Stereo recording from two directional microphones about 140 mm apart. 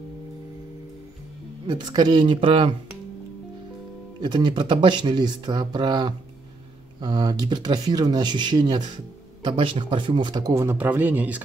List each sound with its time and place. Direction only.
1.7 s speech: 30° right (ahead or behind)
4.2 s a man's voice: 30° right (ahead or behind); by 11.4 s 10° right (ahead or behind)